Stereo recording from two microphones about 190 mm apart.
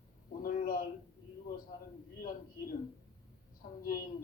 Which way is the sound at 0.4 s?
50° left (ahead or behind).